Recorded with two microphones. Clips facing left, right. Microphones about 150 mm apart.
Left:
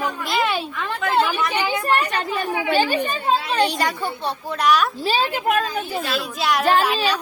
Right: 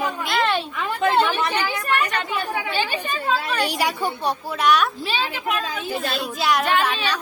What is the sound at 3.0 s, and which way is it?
Speech, 30° left (ahead or behind).